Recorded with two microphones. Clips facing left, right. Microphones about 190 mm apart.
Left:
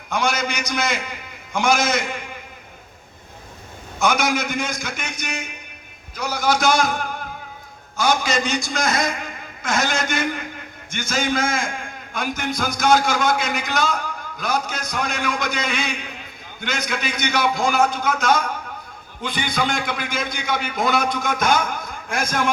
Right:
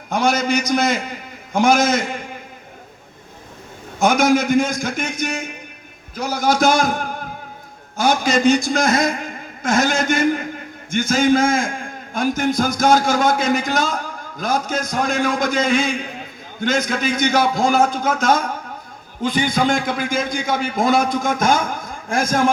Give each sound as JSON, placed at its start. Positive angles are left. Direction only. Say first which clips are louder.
{"t": 0.1, "sound": "a man's voice", "louder": "right 5 dB", "side_deg": -50}
{"t": 4.0, "sound": "a man's voice", "louder": "right 6 dB", "side_deg": -50}